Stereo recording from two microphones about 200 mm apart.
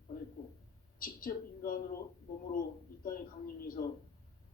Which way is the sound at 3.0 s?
45° left (ahead or behind).